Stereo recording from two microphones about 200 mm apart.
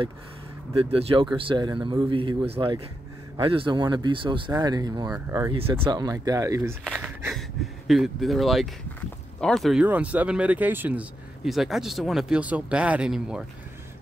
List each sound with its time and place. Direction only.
0.7 s speech: 30° right (ahead or behind)
6.8 s a sound: 5° left (ahead or behind)
9.4 s speech: centre (ahead or behind)